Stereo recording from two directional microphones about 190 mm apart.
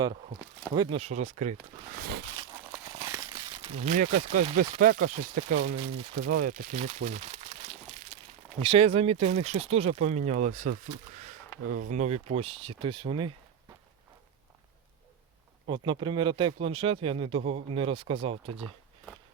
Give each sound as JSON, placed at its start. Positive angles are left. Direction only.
{"t": 0.7, "sound": "speech", "side_deg": -25}
{"t": 2.0, "sound": "a sound", "side_deg": -55}
{"t": 2.7, "sound": "speech", "side_deg": -20}
{"t": 15.6, "sound": "speech", "side_deg": -25}